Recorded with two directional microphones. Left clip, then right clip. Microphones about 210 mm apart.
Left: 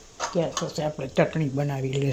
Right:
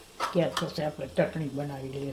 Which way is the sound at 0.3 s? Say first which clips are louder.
Left 2 dB; centre (ahead or behind).